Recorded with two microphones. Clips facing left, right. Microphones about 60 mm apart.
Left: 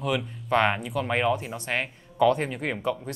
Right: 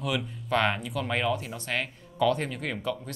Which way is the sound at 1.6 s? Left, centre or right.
Centre.